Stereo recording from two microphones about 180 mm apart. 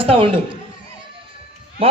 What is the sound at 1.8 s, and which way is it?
Speech, 30° right (ahead or behind).